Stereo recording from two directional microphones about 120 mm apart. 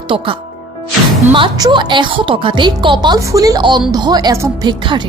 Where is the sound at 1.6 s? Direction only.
40° right (ahead or behind).